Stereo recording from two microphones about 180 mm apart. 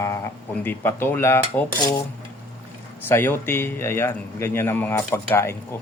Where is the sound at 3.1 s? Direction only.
15° left (ahead or behind).